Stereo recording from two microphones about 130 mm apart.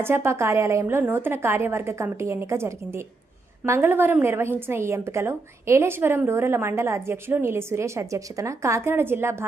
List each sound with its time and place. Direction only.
0.0 s a woman's voice: 20° right (ahead or behind)